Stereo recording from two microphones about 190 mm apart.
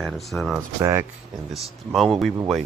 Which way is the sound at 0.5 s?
15° right (ahead or behind).